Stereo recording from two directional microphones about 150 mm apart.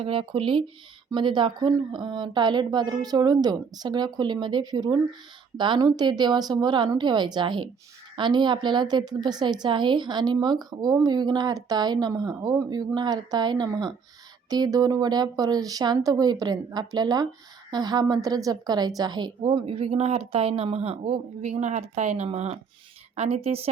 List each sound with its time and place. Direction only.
0.0 s a woman's voice: 35° right (ahead or behind)